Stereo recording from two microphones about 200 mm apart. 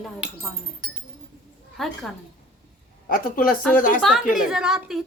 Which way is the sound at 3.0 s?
45° left (ahead or behind).